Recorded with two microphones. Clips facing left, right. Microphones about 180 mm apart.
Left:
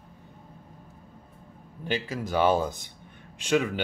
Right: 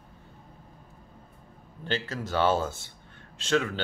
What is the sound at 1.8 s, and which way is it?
Speech, 10° left (ahead or behind).